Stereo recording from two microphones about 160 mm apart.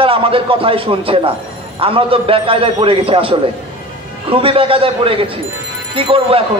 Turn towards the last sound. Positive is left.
turn(degrees=-35)  # may be behind; listen again after turning